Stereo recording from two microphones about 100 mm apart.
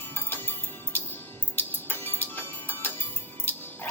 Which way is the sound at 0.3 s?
20° left (ahead or behind).